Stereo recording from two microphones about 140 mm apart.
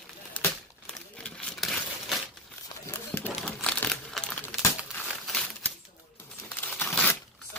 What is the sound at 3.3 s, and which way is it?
Crumpling, 5° left (ahead or behind).